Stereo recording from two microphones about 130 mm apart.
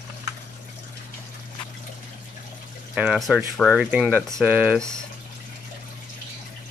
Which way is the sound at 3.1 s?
Centre (ahead or behind).